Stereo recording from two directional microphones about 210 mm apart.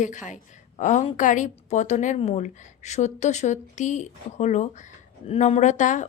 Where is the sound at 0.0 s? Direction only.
35° left (ahead or behind).